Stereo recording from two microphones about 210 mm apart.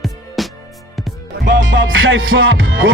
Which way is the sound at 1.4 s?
60° right (ahead or behind).